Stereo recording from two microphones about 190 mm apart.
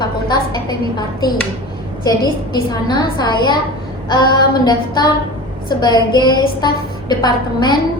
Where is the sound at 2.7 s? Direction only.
20° left (ahead or behind).